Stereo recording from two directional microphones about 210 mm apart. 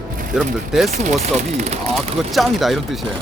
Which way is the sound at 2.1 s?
Centre (ahead or behind).